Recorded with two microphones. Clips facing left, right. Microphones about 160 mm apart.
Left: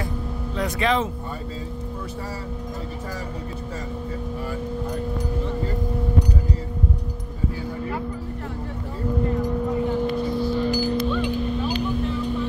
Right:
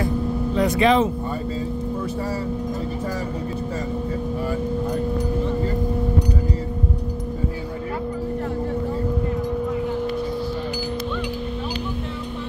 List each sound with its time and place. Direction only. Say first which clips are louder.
0.6 s speech: right 5 dB; 15° right (ahead or behind)